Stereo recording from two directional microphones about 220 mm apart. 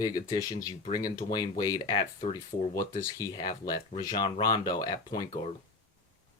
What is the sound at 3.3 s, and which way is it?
Speech, 20° left (ahead or behind).